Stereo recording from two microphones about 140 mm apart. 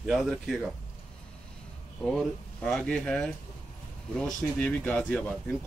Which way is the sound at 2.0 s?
5° left (ahead or behind).